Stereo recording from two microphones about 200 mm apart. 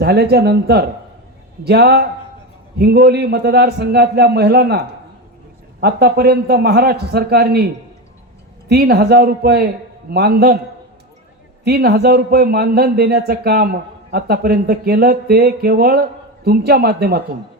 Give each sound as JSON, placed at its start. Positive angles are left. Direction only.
{"t": 0.0, "sound": "a man's voice", "side_deg": -55}
{"t": 5.8, "sound": "speech", "side_deg": -50}
{"t": 11.6, "sound": "speech", "side_deg": -50}